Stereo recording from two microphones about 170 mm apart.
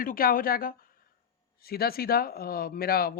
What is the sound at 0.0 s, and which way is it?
Speech, 55° left (ahead or behind).